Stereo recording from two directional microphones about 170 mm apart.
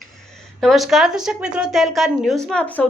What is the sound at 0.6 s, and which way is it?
A woman's voice, centre (ahead or behind).